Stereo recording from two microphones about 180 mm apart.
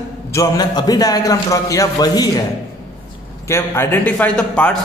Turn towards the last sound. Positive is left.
turn(degrees=5)  # may be behind; listen again after turning